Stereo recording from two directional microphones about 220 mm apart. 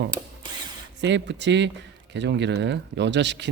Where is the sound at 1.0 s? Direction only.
55° right (ahead or behind).